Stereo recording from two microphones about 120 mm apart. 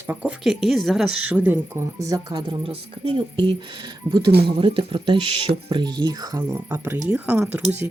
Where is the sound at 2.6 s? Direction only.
50° right (ahead or behind); by 6.4 s 35° right (ahead or behind).